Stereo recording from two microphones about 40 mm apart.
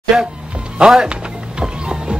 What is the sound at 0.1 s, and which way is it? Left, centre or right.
Speech, centre.